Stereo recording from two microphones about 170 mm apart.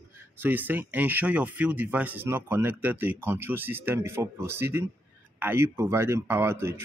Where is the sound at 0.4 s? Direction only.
10° right (ahead or behind).